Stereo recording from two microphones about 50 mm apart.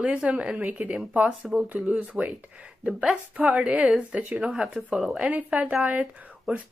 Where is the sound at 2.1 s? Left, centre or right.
Right.